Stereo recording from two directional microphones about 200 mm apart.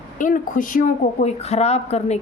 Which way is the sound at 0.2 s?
40° left (ahead or behind).